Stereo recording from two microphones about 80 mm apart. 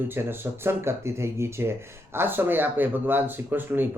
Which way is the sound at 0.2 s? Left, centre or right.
Right.